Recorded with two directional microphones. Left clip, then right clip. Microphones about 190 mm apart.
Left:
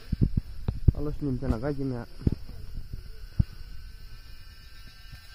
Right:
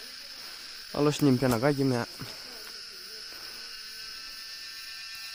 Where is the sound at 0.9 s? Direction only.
40° right (ahead or behind).